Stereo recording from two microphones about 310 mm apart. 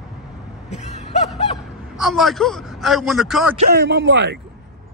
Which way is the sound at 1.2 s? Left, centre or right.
Centre.